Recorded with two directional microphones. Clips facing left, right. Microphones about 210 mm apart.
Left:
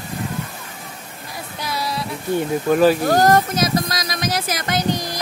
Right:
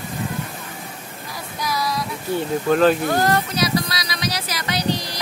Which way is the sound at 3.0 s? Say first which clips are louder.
Left 4 dB; 40° left (ahead or behind).